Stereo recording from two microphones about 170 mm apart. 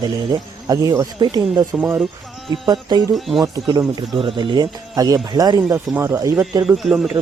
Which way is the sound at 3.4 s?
25° right (ahead or behind).